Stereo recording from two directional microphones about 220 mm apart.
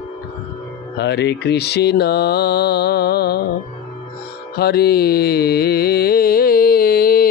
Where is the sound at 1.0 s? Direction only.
50° left (ahead or behind).